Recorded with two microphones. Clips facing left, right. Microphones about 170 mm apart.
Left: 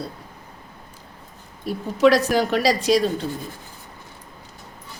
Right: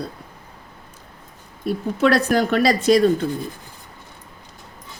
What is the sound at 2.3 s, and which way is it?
Speech, 50° right (ahead or behind).